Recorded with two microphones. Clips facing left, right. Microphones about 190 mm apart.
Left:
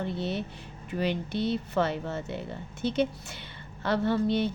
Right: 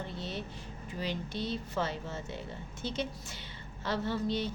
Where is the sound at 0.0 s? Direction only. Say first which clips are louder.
Left 8 dB; 65° left (ahead or behind).